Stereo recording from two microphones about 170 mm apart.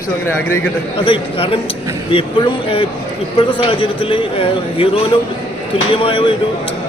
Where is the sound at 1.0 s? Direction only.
30° left (ahead or behind).